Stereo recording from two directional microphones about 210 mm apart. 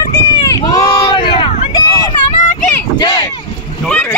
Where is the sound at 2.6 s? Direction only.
15° left (ahead or behind).